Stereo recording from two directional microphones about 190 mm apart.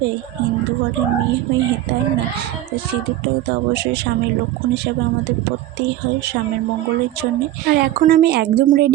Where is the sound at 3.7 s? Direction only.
60° right (ahead or behind).